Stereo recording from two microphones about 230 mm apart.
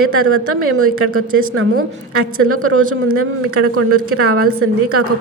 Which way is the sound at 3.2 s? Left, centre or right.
Right.